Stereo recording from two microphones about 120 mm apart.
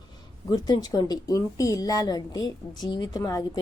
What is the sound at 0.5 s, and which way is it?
A woman's voice, 35° left (ahead or behind).